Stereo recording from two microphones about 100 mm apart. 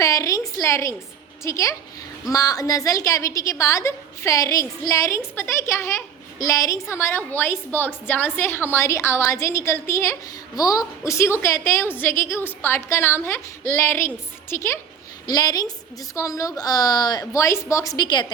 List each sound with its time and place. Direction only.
0.0 s a sound: 30° left (ahead or behind)
1.5 s a woman's voice: 30° left (ahead or behind)
10.5 s a woman's voice: 40° left (ahead or behind)
15.3 s a woman's voice: 40° left (ahead or behind)